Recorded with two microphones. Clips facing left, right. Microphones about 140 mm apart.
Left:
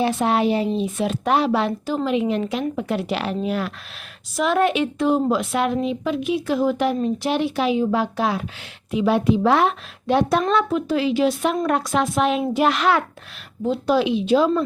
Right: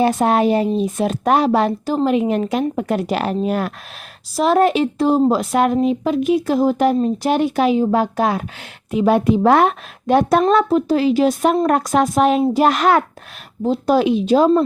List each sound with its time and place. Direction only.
0.0 s a woman's voice: 45° right (ahead or behind)